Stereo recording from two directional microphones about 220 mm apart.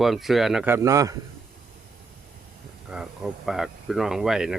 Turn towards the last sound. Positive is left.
turn(degrees=0)  # may be behind; listen again after turning